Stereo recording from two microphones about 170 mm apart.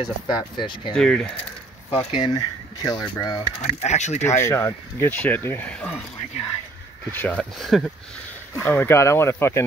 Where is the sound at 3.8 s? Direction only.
40° left (ahead or behind).